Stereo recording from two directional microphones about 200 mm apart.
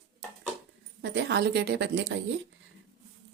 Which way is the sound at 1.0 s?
55° right (ahead or behind).